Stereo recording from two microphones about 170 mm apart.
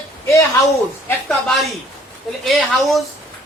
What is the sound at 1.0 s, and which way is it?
A woman's voice, 5° left (ahead or behind).